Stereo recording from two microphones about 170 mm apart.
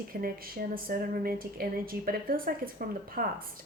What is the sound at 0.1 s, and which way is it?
Speech, 60° right (ahead or behind).